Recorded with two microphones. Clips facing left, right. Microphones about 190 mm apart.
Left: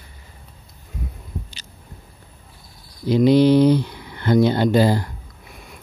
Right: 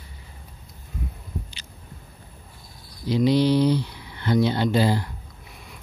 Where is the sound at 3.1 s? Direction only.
55° left (ahead or behind).